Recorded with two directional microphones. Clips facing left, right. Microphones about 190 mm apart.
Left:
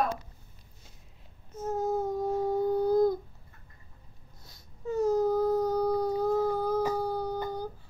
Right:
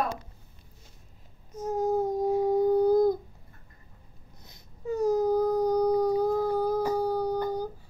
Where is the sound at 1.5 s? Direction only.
15° right (ahead or behind).